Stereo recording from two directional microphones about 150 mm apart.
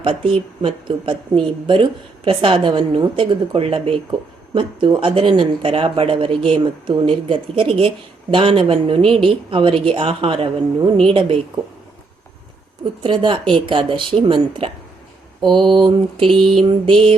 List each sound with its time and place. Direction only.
0.0 s speech: 35° right (ahead or behind)
12.8 s speech: 30° right (ahead or behind)